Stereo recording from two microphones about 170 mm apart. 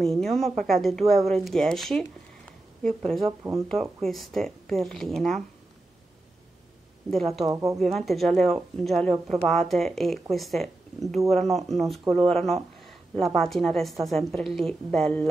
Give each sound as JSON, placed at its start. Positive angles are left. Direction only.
{"t": 0.0, "sound": "a woman's voice", "side_deg": 0}
{"t": 7.1, "sound": "a woman's voice", "side_deg": 0}
{"t": 7.4, "sound": "speech", "side_deg": -20}
{"t": 7.8, "sound": "a woman's voice", "side_deg": 0}